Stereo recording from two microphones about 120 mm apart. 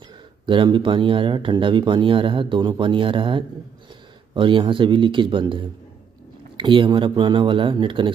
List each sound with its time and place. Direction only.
0.5 s speech: 45° right (ahead or behind)